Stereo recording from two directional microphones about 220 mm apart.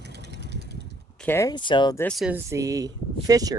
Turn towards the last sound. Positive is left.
turn(degrees=-15)  # may be behind; listen again after turning